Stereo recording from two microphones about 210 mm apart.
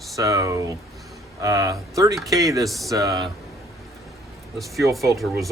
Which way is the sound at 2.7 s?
Centre (ahead or behind).